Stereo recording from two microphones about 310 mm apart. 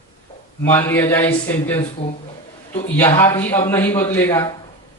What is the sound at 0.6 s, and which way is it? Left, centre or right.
A man's voice, centre.